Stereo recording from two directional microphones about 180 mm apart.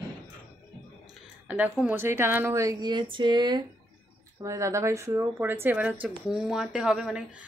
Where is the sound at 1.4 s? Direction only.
10° right (ahead or behind).